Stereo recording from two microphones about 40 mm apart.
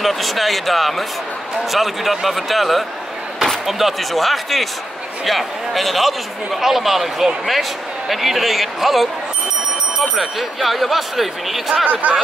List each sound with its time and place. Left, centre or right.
0.0 s a man's voice: centre
10.1 s a man's voice: centre
11.9 s speech: right